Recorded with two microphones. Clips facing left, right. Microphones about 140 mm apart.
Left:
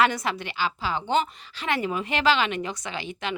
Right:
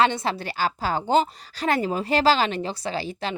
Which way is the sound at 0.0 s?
25° right (ahead or behind).